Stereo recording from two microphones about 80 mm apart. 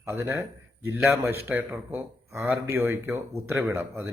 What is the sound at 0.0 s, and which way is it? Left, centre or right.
Speech, right.